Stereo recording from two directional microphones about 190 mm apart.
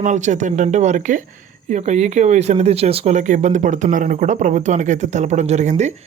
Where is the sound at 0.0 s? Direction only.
40° right (ahead or behind).